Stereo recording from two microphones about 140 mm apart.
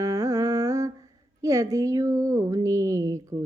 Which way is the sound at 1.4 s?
25° right (ahead or behind).